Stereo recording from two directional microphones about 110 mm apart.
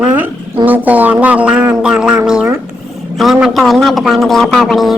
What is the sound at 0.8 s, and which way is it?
A man's voice, 15° right (ahead or behind).